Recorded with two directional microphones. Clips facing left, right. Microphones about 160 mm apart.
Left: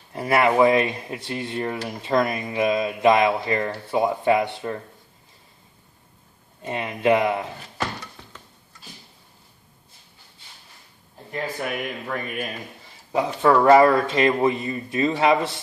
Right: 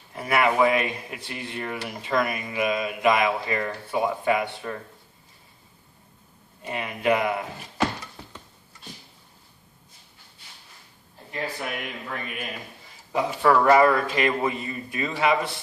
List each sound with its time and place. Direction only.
0.1 s speech: 35° left (ahead or behind)
6.6 s speech: 25° left (ahead or behind)
11.8 s speech: 45° left (ahead or behind)
13.1 s speech: 25° left (ahead or behind)